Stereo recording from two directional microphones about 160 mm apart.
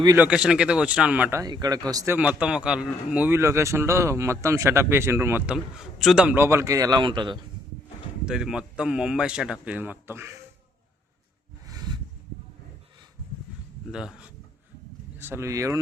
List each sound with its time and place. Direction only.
0.2 s a man's voice: 5° right (ahead or behind)
1.5 s speech: 25° right (ahead or behind)
2.1 s a man's voice: 5° right (ahead or behind); by 7.3 s 30° right (ahead or behind)
8.2 s a man's voice: 5° right (ahead or behind)
11.7 s a sound: 25° right (ahead or behind)
13.9 s a man's voice: 5° right (ahead or behind)
15.2 s speech: 15° right (ahead or behind)